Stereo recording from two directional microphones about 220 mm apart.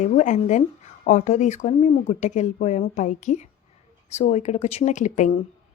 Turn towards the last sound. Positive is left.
turn(degrees=35)  # may be behind; listen again after turning